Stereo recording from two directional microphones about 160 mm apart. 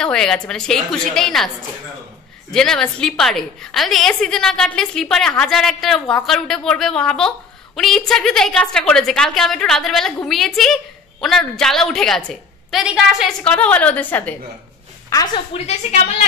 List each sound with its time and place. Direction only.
0.0 s a woman's voice: 5° left (ahead or behind)
2.5 s a woman's voice: 5° left (ahead or behind)
15.0 s a woman's voice: 20° left (ahead or behind)
15.5 s a woman's voice: 40° left (ahead or behind)